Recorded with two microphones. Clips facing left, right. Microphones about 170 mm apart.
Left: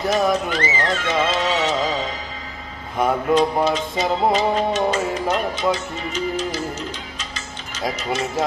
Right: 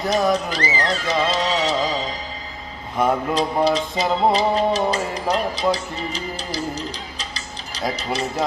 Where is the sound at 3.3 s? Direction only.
35° right (ahead or behind).